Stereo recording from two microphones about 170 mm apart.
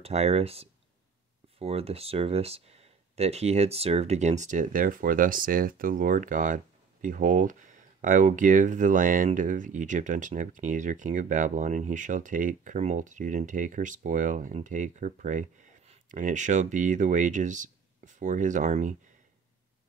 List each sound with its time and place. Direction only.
0.0 s speech: 40° right (ahead or behind)